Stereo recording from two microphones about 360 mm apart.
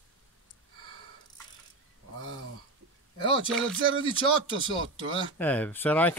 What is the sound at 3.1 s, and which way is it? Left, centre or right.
Speech, centre.